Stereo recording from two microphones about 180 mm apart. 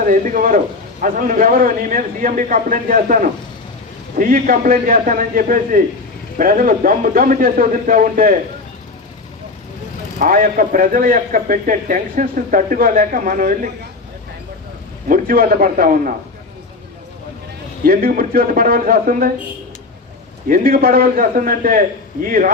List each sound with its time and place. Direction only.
0.0 s a man's voice: 50° right (ahead or behind)
10.2 s a man's voice: 50° right (ahead or behind)
15.1 s a man's voice: 55° right (ahead or behind)
17.8 s a man's voice: 55° right (ahead or behind)
20.5 s a man's voice: 55° right (ahead or behind)